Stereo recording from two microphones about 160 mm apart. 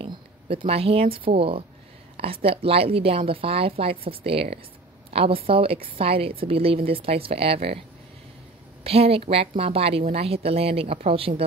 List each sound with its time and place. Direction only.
0.0 s a sound: 35° right (ahead or behind)
1.1 s a woman's voice: 35° right (ahead or behind)
8.8 s a woman's voice: 40° right (ahead or behind)